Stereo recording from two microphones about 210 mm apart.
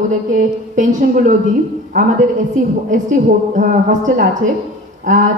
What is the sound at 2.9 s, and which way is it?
Speech, 40° right (ahead or behind).